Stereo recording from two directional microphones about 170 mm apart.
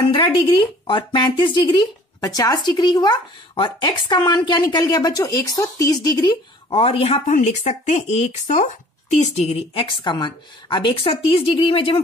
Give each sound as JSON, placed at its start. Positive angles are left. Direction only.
{"t": 0.1, "sound": "speech", "side_deg": 30}
{"t": 6.7, "sound": "a woman's voice", "side_deg": 35}